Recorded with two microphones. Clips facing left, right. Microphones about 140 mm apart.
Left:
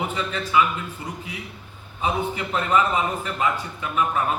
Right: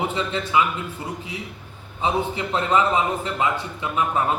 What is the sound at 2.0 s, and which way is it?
A man's voice, 25° right (ahead or behind).